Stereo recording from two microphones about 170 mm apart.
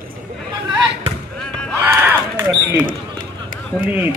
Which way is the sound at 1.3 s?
5° left (ahead or behind).